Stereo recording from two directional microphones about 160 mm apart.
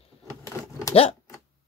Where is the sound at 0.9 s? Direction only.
40° left (ahead or behind).